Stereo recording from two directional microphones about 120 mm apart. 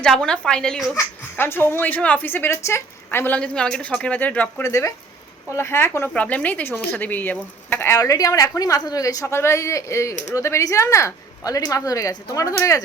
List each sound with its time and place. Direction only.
0.0 s speech: 5° left (ahead or behind)
0.9 s speech: 20° left (ahead or behind)
4.6 s a woman's voice: 25° left (ahead or behind)